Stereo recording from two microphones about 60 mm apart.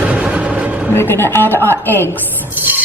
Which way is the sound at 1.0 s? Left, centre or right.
Left.